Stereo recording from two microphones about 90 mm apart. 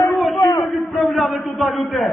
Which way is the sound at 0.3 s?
40° left (ahead or behind).